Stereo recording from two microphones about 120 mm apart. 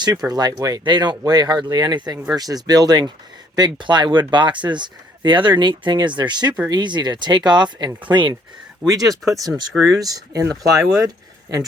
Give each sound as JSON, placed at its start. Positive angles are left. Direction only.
{"t": 0.3, "sound": "speech", "side_deg": -35}
{"t": 8.9, "sound": "speech", "side_deg": -30}
{"t": 9.7, "sound": "speech", "side_deg": 0}
{"t": 10.0, "sound": "speech", "side_deg": -30}